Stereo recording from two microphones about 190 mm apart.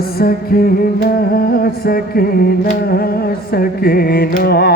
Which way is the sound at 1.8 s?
50° left (ahead or behind).